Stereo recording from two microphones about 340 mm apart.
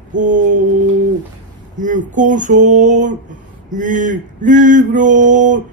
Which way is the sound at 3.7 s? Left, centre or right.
Right.